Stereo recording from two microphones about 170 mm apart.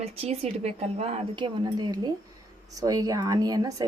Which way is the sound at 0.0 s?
40° right (ahead or behind).